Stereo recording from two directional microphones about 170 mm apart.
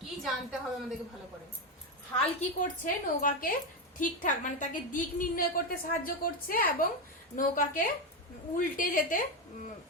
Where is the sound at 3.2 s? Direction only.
55° left (ahead or behind).